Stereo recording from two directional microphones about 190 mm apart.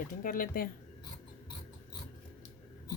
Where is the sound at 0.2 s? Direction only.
45° left (ahead or behind).